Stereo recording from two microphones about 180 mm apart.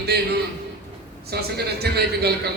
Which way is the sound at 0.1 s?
65° right (ahead or behind).